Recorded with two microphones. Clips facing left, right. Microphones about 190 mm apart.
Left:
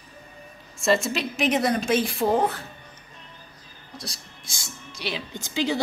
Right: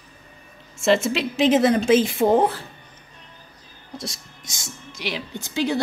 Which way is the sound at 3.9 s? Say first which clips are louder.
Right 5 dB; 25° right (ahead or behind).